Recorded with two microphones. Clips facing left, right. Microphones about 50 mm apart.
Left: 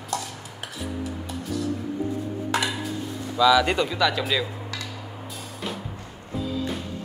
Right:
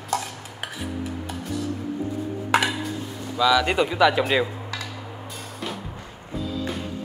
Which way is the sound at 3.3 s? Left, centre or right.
Centre.